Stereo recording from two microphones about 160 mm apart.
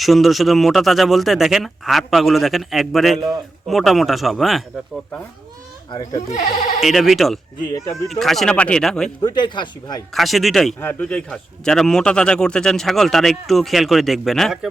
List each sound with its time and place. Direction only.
0.0 s speech: centre (ahead or behind)
6.1 s speech: 55° left (ahead or behind)
6.8 s speech: centre (ahead or behind)
9.2 s speech: 30° left (ahead or behind)
10.2 s speech: centre (ahead or behind)
10.8 s speech: 10° left (ahead or behind)